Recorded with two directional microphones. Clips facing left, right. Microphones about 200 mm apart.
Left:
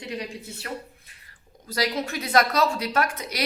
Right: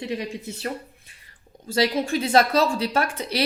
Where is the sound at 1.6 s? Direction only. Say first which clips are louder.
Right 5 dB; 25° right (ahead or behind).